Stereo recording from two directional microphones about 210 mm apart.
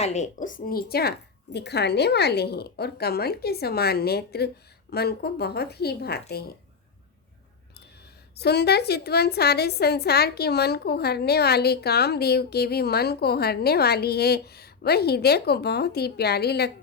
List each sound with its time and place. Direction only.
0.0 s a woman's voice: 35° left (ahead or behind); by 6.2 s 50° left (ahead or behind)
8.4 s a woman's voice: 50° left (ahead or behind)